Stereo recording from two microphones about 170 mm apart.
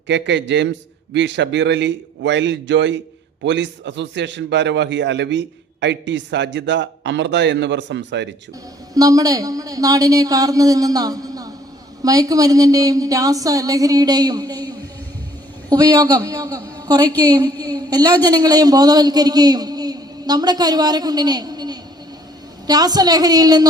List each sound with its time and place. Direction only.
0.1 s a man's voice: 90° right
9.0 s a woman's voice: 20° right (ahead or behind)